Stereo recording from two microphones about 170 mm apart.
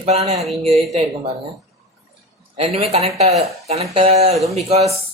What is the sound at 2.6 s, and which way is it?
Speech, 35° right (ahead or behind).